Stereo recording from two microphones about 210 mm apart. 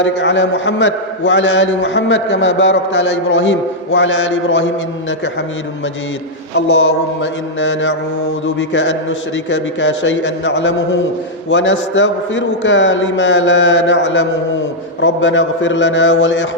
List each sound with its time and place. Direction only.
0.0 s a man's voice: 60° left (ahead or behind)
6.7 s a man's voice: 60° left (ahead or behind)